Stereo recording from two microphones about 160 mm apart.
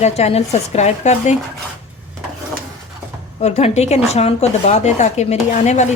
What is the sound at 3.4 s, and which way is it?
Speech, 40° left (ahead or behind).